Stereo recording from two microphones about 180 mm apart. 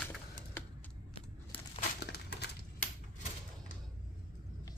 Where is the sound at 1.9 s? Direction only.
65° left (ahead or behind).